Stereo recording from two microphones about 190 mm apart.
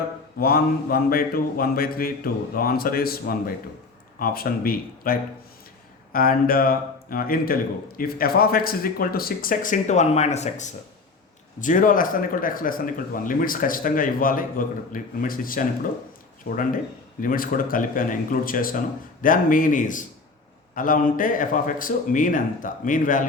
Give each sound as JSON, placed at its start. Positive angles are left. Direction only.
{"t": 0.3, "sound": "a man's voice", "side_deg": 50}
{"t": 6.1, "sound": "a man's voice", "side_deg": 50}